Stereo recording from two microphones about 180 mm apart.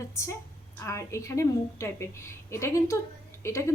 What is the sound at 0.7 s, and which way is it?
A woman's voice, 15° left (ahead or behind).